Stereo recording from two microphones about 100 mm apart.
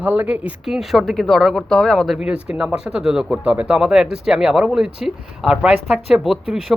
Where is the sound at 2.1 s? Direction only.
10° right (ahead or behind).